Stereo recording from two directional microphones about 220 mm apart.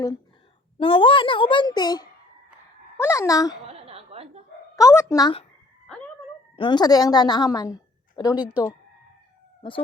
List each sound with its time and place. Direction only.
0.8 s a child's voice: 25° left (ahead or behind)
3.7 s a sound: 25° right (ahead or behind)
4.8 s a woman's voice: 15° left (ahead or behind)
6.6 s a woman's voice: 20° left (ahead or behind)